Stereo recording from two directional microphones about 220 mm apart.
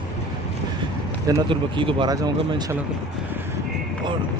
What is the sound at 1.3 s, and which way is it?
Speech, 20° right (ahead or behind).